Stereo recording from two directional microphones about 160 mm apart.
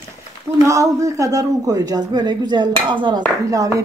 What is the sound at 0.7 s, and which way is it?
A woman's voice, 20° right (ahead or behind).